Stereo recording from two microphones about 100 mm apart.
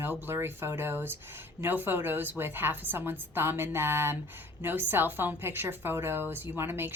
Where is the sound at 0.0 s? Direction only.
25° right (ahead or behind).